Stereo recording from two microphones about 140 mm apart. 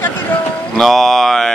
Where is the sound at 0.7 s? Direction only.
Centre (ahead or behind).